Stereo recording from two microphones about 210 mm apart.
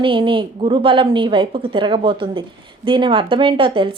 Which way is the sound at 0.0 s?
25° right (ahead or behind).